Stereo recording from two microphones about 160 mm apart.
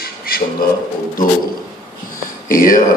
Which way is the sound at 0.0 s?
65° left (ahead or behind).